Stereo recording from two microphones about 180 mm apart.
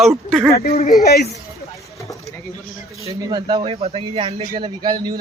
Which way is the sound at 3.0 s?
20° right (ahead or behind).